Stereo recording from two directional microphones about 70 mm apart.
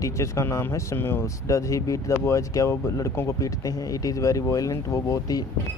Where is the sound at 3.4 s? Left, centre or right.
Left.